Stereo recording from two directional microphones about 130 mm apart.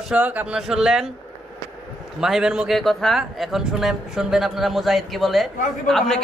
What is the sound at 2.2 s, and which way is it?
A man's voice, 5° right (ahead or behind).